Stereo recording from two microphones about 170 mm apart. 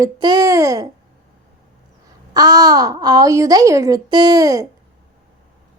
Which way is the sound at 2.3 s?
25° right (ahead or behind).